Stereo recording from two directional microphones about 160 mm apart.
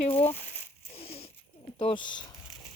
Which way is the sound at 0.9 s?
40° left (ahead or behind).